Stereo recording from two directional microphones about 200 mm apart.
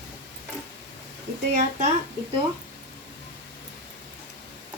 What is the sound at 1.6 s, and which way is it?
Speech, 35° right (ahead or behind).